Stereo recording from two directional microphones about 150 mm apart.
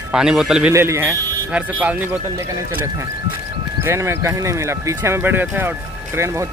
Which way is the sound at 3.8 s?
20° right (ahead or behind).